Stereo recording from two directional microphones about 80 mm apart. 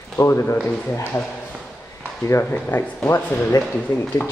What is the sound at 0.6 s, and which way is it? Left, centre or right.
Speech, centre.